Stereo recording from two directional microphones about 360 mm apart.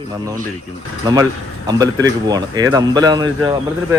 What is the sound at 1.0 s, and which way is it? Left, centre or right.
Speech, centre.